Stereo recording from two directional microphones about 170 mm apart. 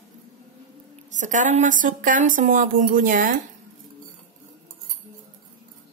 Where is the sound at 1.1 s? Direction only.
45° right (ahead or behind).